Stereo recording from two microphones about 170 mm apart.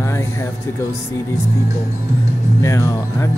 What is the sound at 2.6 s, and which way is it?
Speech, 15° left (ahead or behind).